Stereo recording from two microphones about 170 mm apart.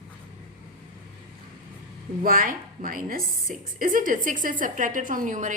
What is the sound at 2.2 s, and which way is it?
A woman's voice, 55° right (ahead or behind).